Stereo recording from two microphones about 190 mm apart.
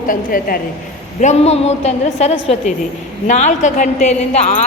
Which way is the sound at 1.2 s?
35° left (ahead or behind).